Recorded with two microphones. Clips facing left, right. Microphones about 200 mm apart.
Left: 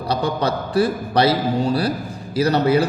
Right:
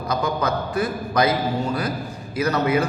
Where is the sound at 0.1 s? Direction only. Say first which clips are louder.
Left 2 dB; 30° left (ahead or behind).